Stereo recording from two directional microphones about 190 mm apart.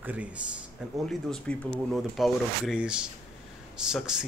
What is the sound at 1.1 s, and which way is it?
A man's voice, 5° left (ahead or behind).